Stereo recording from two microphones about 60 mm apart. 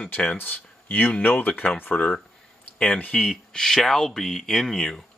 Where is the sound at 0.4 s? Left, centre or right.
Left; by 5.0 s centre.